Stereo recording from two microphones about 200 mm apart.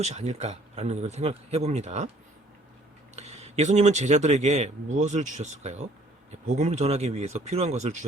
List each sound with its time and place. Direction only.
0.0 s speech: 35° right (ahead or behind)
3.2 s speech: 35° right (ahead or behind)